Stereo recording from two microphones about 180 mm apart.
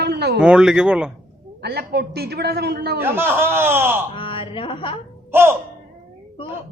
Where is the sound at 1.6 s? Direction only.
60° right (ahead or behind).